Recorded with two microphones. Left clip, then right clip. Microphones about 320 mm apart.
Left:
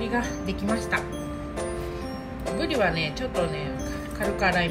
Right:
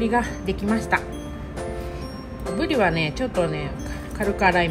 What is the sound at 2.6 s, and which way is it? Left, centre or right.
Speech, right.